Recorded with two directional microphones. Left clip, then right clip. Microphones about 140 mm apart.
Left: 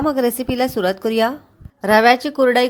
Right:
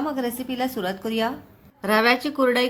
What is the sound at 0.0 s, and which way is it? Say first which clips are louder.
A woman's voice: left 9 dB; 55° left (ahead or behind).